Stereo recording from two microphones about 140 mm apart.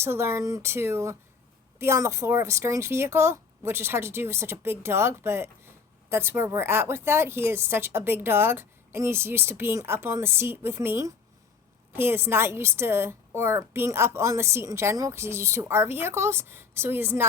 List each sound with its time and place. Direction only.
0.0 s a woman's voice: 20° right (ahead or behind)